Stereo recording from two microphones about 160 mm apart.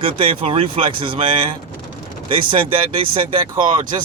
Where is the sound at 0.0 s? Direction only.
35° right (ahead or behind).